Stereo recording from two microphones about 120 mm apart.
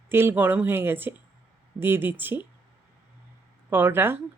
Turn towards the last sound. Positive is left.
turn(degrees=-20)  # may be behind; listen again after turning